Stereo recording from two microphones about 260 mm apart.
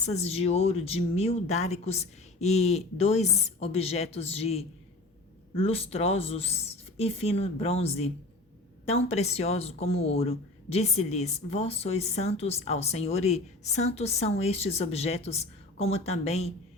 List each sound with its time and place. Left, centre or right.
0.0 s a woman's voice: left